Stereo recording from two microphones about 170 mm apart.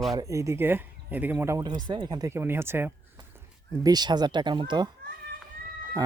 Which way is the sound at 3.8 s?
25° right (ahead or behind).